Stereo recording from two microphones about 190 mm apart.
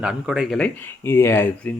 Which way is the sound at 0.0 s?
5° right (ahead or behind).